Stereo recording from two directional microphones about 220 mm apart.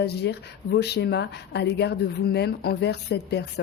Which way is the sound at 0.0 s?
50° left (ahead or behind).